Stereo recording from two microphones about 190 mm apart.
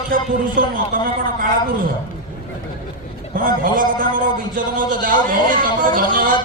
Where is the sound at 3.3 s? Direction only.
45° right (ahead or behind).